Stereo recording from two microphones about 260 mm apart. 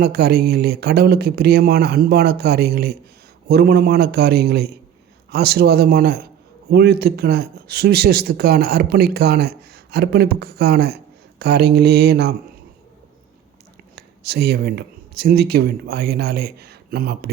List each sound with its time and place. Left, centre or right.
0.0 s speech: right
13.9 s speech: right